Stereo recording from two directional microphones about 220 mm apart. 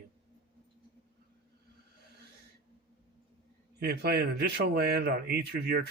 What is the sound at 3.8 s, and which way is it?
Speech, 50° right (ahead or behind).